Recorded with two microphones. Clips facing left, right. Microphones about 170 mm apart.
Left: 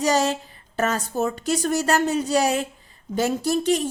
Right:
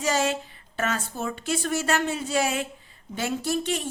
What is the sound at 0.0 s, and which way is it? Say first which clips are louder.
A woman's voice: left 4 dB; 40° left (ahead or behind).